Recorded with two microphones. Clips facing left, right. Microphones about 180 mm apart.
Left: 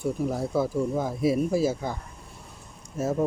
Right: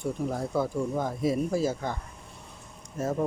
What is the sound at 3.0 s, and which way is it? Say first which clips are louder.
Speech: left 2 dB; 10° left (ahead or behind).